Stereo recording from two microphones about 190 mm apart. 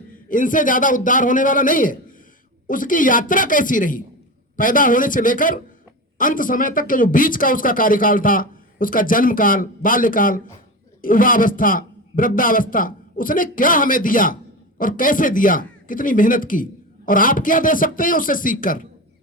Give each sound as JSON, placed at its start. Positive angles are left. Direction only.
{"t": 0.1, "sound": "speech", "side_deg": 45}